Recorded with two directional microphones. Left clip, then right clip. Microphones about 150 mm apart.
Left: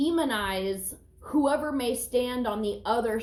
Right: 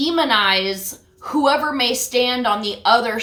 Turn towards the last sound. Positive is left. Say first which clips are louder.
# right 11 dB
turn(degrees=-20)  # may be behind; listen again after turning